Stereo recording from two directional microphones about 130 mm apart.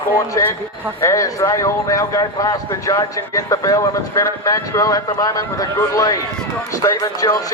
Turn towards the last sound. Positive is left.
turn(degrees=25)  # may be behind; listen again after turning